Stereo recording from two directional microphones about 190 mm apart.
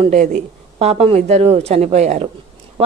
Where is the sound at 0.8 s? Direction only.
30° right (ahead or behind).